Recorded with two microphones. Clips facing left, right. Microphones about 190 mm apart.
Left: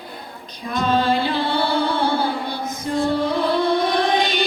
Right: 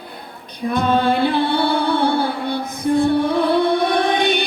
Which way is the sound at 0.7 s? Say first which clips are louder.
Right 2 dB; 60° right (ahead or behind).